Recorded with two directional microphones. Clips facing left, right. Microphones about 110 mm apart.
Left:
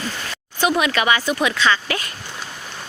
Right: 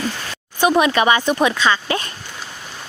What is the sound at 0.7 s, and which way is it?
Speech, 25° right (ahead or behind).